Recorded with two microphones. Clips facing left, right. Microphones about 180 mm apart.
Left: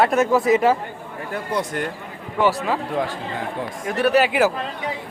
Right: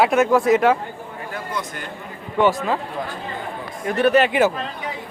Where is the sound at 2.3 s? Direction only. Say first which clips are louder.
Right 1 dB; 5° left (ahead or behind).